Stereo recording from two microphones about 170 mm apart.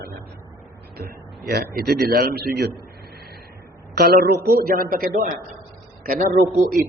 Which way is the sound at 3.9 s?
65° right (ahead or behind).